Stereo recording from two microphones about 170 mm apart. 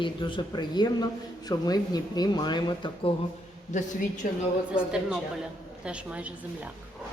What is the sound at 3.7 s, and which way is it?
Speech, 45° left (ahead or behind).